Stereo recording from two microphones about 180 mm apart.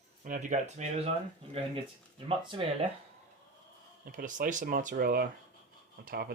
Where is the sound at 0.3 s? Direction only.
45° right (ahead or behind); by 2.6 s 30° right (ahead or behind).